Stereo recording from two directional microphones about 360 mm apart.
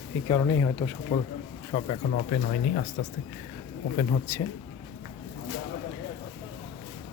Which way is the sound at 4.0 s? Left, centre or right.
Centre.